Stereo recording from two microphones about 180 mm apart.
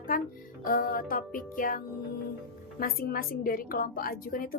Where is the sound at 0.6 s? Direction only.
50° left (ahead or behind).